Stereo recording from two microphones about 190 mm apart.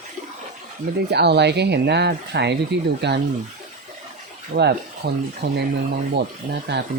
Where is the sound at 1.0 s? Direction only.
60° right (ahead or behind).